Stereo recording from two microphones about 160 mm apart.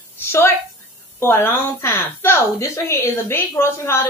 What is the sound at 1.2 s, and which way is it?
A woman's voice, 15° left (ahead or behind).